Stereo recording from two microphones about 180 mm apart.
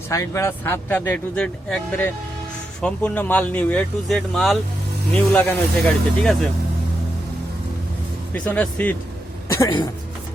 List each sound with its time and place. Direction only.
0.1 s speech: 15° left (ahead or behind)
8.3 s speech: 10° left (ahead or behind)
9.5 s speech: 20° left (ahead or behind)